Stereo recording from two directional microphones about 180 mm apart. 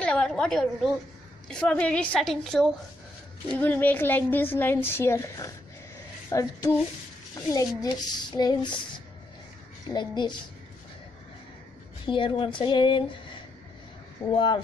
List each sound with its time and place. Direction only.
0.0 s a woman's voice: 5° left (ahead or behind); by 8.7 s 25° left (ahead or behind)
9.8 s a child's voice: 25° left (ahead or behind)
12.1 s a child's voice: 30° left (ahead or behind)